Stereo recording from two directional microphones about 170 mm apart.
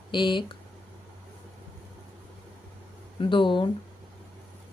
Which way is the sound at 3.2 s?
30° left (ahead or behind).